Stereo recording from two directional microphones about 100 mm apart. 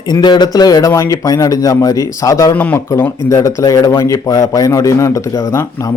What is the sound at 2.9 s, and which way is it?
Speech, 30° left (ahead or behind).